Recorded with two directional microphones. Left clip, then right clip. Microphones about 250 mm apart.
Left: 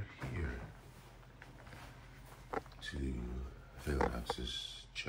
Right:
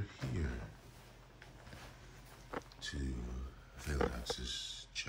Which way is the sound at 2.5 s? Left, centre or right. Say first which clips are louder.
Left 2 dB; centre.